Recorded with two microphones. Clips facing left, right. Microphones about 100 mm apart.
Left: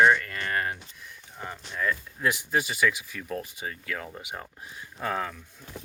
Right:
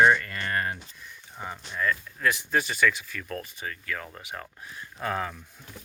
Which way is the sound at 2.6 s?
5° left (ahead or behind).